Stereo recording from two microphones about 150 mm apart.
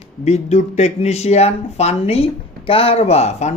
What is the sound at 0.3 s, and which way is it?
Speech, 45° left (ahead or behind).